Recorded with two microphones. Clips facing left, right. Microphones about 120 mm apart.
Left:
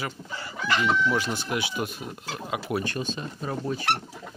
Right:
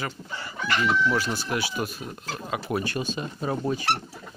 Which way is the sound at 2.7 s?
5° right (ahead or behind).